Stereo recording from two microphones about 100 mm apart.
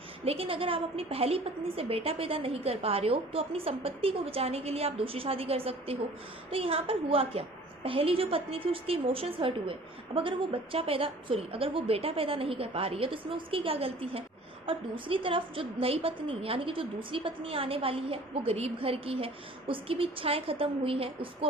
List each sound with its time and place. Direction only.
0.3 s a woman's voice: 70° right (ahead or behind)
14.7 s a woman's voice: 60° right (ahead or behind)